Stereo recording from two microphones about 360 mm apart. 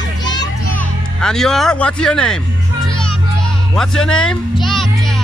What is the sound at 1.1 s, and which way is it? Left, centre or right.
Speech, centre.